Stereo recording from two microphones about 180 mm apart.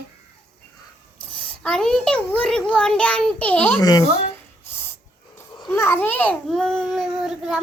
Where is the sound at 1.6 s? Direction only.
5° left (ahead or behind).